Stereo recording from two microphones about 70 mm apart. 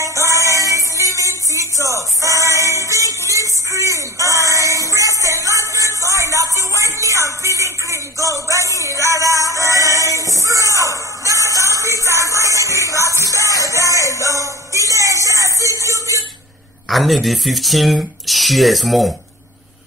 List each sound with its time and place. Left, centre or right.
0.0 s music: right
16.9 s speech: centre